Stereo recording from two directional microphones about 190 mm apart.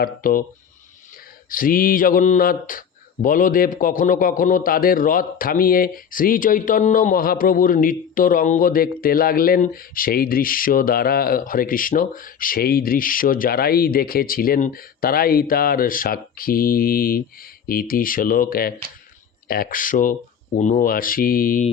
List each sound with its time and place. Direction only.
0.0 s speech: 50° left (ahead or behind)
1.5 s speech: 45° left (ahead or behind)